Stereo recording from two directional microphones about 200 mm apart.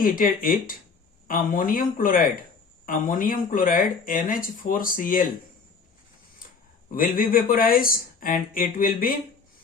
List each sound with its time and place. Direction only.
0.0 s speech: 45° left (ahead or behind)
6.8 s speech: 45° left (ahead or behind)